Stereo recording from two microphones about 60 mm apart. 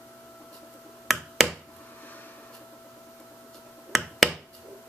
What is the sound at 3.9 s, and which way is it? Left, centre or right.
Finger snapping, centre.